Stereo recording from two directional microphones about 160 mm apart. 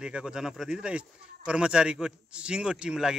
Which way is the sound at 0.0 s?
5° right (ahead or behind).